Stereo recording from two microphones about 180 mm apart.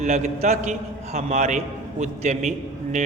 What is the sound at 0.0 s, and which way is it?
A man's voice, 40° right (ahead or behind).